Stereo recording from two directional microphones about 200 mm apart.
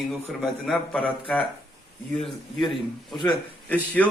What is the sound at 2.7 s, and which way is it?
Speech, 25° left (ahead or behind).